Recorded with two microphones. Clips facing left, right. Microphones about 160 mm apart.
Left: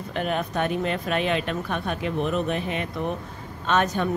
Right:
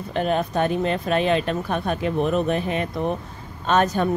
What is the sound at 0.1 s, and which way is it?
Speech, 35° right (ahead or behind).